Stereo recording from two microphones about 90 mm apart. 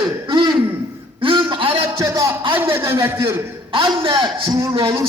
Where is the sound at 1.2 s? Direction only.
65° right (ahead or behind).